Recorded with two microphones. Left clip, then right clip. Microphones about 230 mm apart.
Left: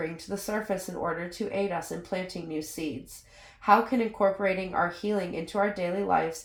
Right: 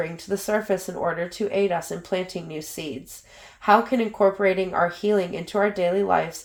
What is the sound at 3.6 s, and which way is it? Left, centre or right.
Speech, right.